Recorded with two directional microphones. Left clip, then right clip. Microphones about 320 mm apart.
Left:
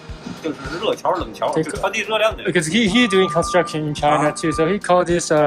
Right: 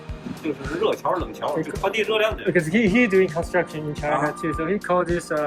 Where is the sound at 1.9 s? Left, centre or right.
Centre.